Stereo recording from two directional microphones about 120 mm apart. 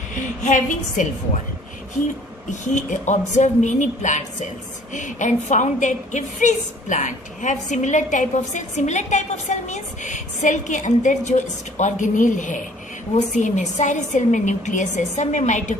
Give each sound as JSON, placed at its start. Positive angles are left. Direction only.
{"t": 0.1, "sound": "a woman's voice", "side_deg": 90}
{"t": 2.5, "sound": "a woman's voice", "side_deg": 90}